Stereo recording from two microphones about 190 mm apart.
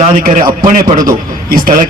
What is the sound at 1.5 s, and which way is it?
Speech, 50° right (ahead or behind).